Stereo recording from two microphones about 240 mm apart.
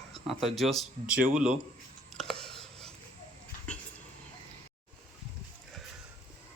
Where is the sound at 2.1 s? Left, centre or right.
Centre.